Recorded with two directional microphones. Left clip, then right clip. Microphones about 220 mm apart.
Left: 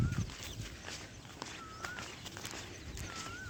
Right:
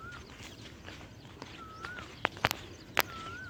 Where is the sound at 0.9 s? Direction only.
55° left (ahead or behind).